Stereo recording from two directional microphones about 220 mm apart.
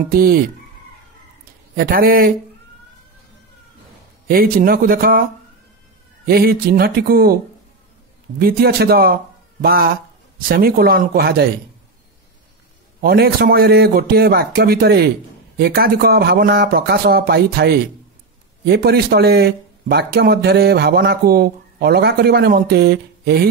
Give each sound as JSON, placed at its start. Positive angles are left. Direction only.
{"t": 0.1, "sound": "speech", "side_deg": -40}
{"t": 1.8, "sound": "speech", "side_deg": -40}
{"t": 4.3, "sound": "speech", "side_deg": -40}
{"t": 6.2, "sound": "speech", "side_deg": -45}
{"t": 8.4, "sound": "speech", "side_deg": -45}
{"t": 13.0, "sound": "speech", "side_deg": -45}